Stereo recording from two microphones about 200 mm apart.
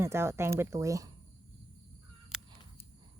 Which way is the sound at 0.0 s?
15° right (ahead or behind).